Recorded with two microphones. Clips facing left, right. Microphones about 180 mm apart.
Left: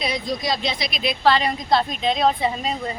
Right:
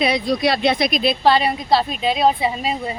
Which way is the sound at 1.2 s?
15° right (ahead or behind).